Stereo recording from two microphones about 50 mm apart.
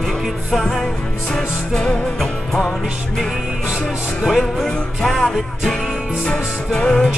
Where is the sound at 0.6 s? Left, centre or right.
Centre.